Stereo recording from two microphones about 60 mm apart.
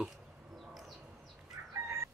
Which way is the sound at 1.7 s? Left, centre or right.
Right.